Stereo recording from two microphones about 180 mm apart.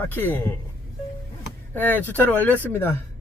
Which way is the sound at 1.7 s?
10° left (ahead or behind).